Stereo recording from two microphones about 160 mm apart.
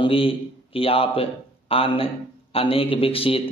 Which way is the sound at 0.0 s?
35° left (ahead or behind).